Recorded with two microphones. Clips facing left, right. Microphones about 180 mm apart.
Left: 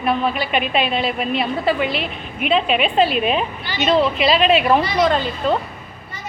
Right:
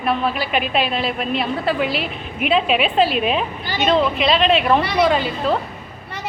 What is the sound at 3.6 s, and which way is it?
Speech, 50° right (ahead or behind).